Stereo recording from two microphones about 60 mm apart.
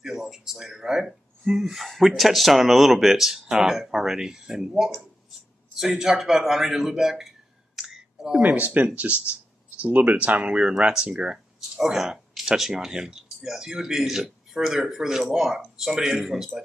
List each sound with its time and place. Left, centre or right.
0.0 s a man's voice: centre
8.4 s speech: right
10.4 s speech: centre